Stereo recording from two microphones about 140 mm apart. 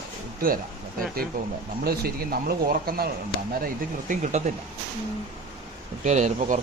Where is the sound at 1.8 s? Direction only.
90° right.